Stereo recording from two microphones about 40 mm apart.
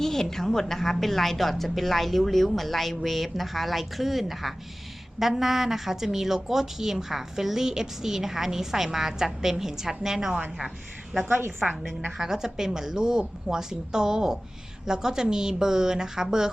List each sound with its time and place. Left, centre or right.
0.0 s a woman's voice: centre
11.3 s a woman's voice: right
12.1 s a woman's voice: centre